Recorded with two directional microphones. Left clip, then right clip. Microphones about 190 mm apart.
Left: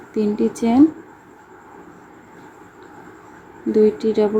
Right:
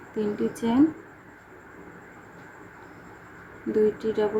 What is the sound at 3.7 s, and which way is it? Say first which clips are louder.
Speech: left 7 dB; 25° left (ahead or behind).